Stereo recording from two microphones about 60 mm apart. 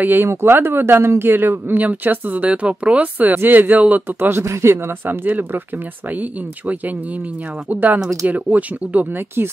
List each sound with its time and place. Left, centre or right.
0.0 s speech: right
5.0 s speech: right
7.7 s speech: right